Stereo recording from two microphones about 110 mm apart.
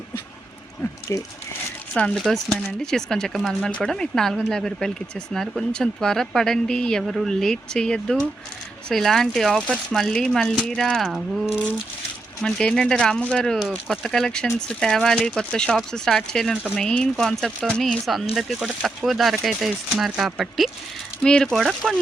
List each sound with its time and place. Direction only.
1.1 s speech: 30° left (ahead or behind)
1.9 s speech: 10° left (ahead or behind)
2.1 s speech: centre (ahead or behind)
12.4 s speech: 5° left (ahead or behind)